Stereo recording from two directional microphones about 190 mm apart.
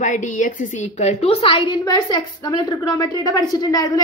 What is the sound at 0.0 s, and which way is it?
A woman's voice, 40° left (ahead or behind).